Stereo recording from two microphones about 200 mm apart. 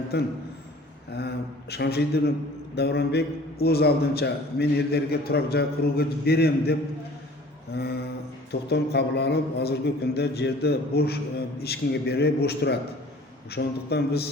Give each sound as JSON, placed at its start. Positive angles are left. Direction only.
{"t": 0.1, "sound": "a man's voice", "side_deg": 55}
{"t": 1.7, "sound": "a man's voice", "side_deg": 55}
{"t": 7.7, "sound": "a sound", "side_deg": 55}
{"t": 8.7, "sound": "a man's voice", "side_deg": 55}